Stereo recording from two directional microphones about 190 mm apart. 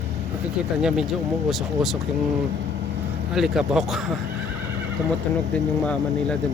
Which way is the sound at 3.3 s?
Centre (ahead or behind).